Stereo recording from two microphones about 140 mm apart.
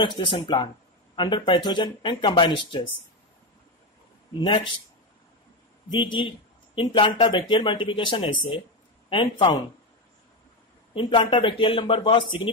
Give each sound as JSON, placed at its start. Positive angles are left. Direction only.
{"t": 0.0, "sound": "a man's voice", "side_deg": 35}
{"t": 4.4, "sound": "a man's voice", "side_deg": 35}
{"t": 5.9, "sound": "a man's voice", "side_deg": 35}
{"t": 11.0, "sound": "a man's voice", "side_deg": 35}